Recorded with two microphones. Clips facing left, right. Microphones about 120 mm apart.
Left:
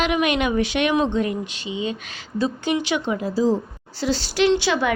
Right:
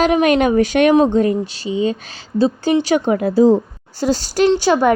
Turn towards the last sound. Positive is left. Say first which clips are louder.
# right 6 dB
turn(degrees=-45)  # may be behind; listen again after turning